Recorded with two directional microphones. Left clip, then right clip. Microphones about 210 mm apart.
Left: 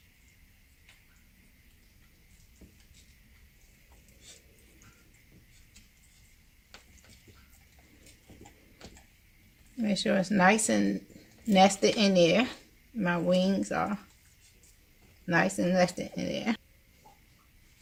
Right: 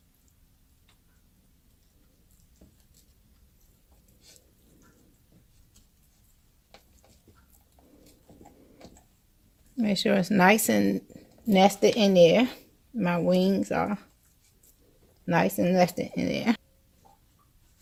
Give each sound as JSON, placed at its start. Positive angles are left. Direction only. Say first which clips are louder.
{"t": 9.7, "sound": "speech", "louder": "right 3 dB", "side_deg": -45}
{"t": 15.3, "sound": "speech", "louder": "right 2 dB", "side_deg": -35}